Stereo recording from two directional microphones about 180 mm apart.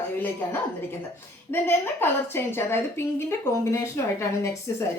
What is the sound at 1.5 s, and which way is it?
Speech, 10° left (ahead or behind).